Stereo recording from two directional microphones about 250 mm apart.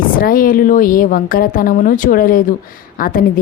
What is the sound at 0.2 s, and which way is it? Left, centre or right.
A woman's voice, left.